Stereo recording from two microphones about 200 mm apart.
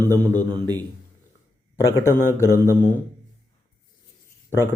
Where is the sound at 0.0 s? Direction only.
10° left (ahead or behind).